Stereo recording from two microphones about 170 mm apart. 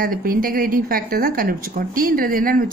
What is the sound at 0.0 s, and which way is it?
A woman's voice, 60° right (ahead or behind).